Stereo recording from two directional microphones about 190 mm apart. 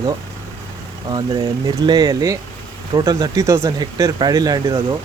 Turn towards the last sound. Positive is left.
turn(degrees=-20)  # may be behind; listen again after turning